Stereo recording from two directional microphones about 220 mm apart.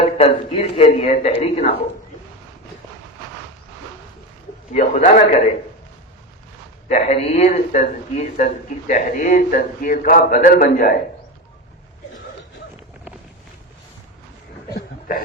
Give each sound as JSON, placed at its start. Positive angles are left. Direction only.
{"t": 0.0, "sound": "speech", "side_deg": 25}
{"t": 4.7, "sound": "speech", "side_deg": 35}
{"t": 6.8, "sound": "speech", "side_deg": 35}
{"t": 14.7, "sound": "a sound", "side_deg": 40}